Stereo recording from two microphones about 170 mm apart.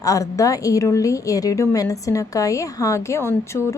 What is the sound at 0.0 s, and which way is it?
A woman's voice, 20° left (ahead or behind).